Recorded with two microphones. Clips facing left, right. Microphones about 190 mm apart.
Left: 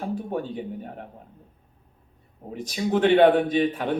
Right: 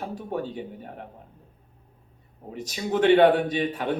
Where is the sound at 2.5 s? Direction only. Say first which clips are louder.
Left 3 dB; 50° left (ahead or behind).